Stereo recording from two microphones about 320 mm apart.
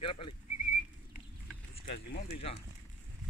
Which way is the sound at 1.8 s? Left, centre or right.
Centre.